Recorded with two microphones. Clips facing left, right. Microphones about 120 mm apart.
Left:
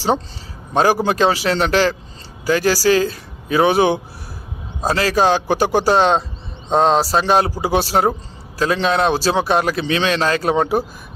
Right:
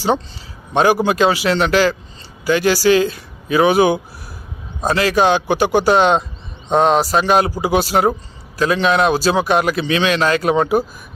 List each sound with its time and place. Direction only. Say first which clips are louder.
0.7 s a man's voice: right 1 dB; 35° left (ahead or behind)